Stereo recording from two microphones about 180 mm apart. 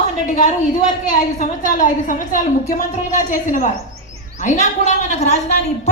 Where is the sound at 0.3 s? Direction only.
45° left (ahead or behind).